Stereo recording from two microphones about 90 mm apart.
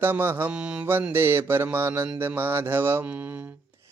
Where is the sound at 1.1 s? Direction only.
25° right (ahead or behind).